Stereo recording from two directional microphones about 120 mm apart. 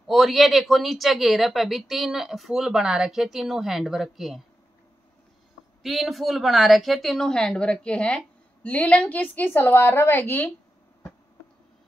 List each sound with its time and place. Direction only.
0.0 s speech: centre (ahead or behind)
5.8 s a woman's voice: centre (ahead or behind); by 10.5 s 15° left (ahead or behind)